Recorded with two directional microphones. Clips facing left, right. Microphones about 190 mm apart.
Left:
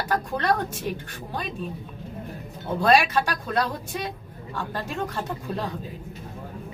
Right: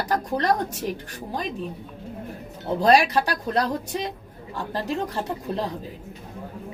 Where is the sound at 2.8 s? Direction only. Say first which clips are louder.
Right 2 dB; 35° right (ahead or behind).